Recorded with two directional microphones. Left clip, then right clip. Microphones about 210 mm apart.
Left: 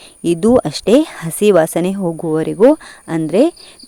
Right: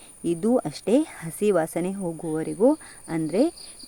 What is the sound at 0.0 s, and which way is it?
Speech, 45° left (ahead or behind).